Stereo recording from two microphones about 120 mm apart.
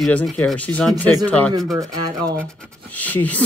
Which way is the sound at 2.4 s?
10° left (ahead or behind).